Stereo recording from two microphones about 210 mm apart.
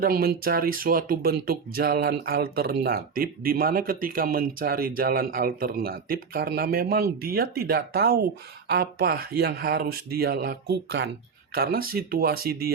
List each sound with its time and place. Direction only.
0.0 s speech: 45° right (ahead or behind)